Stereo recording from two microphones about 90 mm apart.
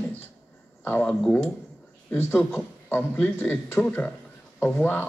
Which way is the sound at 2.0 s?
25° left (ahead or behind).